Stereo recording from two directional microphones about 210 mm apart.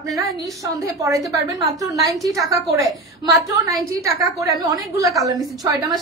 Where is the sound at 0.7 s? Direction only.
15° right (ahead or behind).